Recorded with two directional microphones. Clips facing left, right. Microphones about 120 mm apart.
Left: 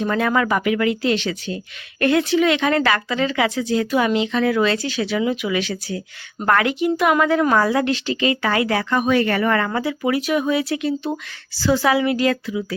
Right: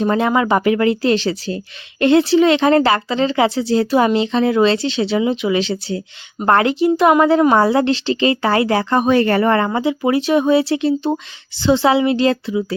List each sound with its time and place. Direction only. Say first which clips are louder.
0.0 s speech: right 4 dB; 30° right (ahead or behind)